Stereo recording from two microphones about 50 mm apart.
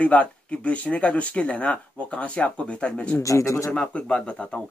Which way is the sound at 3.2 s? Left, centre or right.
Left.